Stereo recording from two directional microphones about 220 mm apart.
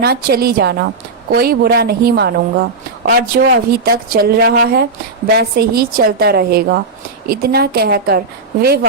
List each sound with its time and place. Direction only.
0.0 s a woman's voice: 45° right (ahead or behind)